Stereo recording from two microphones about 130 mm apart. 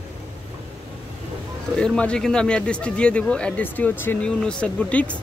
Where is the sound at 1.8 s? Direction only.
10° left (ahead or behind).